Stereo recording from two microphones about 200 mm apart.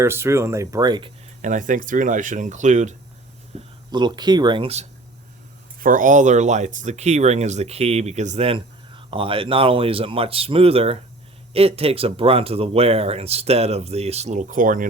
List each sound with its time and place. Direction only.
0.0 s speech: 15° right (ahead or behind)
1.4 s speech: 40° right (ahead or behind)
3.5 s a sound: 30° right (ahead or behind)
3.9 s speech: 20° right (ahead or behind)
5.8 s speech: 40° right (ahead or behind)